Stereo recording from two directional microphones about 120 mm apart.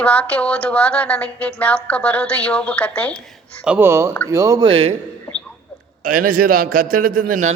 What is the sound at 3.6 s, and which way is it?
Speech, 10° right (ahead or behind).